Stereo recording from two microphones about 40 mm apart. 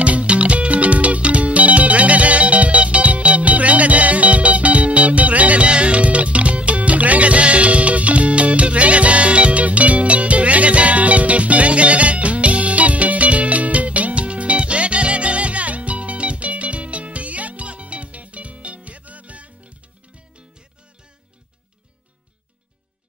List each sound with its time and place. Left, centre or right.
0.0 s music: right